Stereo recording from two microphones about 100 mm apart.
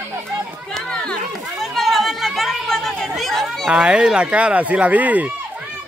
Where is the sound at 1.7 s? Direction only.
Centre (ahead or behind).